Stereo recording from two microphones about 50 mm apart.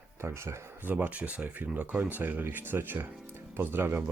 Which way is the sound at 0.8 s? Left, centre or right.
Right.